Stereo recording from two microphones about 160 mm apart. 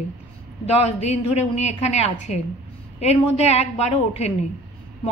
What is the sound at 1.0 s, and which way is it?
A woman's voice, 45° left (ahead or behind).